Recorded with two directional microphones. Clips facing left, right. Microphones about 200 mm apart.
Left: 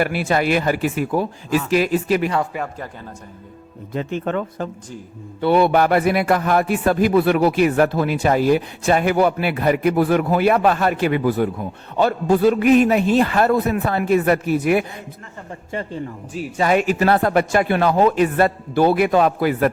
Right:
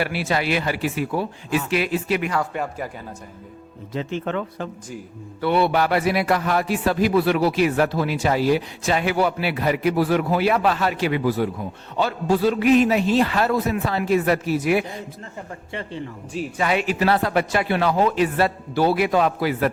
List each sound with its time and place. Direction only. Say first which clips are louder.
0.0 s a man's voice: left 4 dB; 50° left (ahead or behind)
2.5 s speech: even; 5° left (ahead or behind)
3.9 s a man's voice: left 3 dB; 50° left (ahead or behind)